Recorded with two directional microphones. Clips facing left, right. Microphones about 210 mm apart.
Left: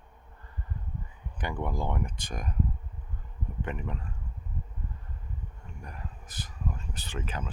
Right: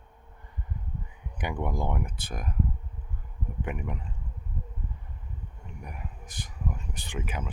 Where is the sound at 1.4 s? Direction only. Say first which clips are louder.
Right 2 dB; 15° right (ahead or behind).